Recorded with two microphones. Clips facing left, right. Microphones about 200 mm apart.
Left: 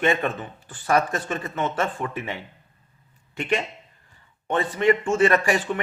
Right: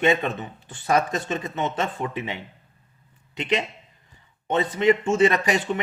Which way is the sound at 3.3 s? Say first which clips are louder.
Even; 20° right (ahead or behind).